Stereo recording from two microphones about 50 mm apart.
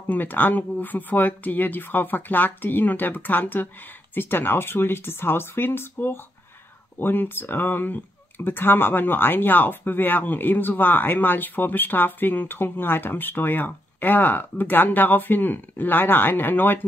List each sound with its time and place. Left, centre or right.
0.1 s speech: left